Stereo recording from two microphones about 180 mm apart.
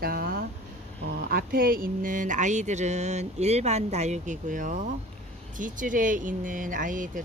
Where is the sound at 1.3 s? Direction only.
55° right (ahead or behind).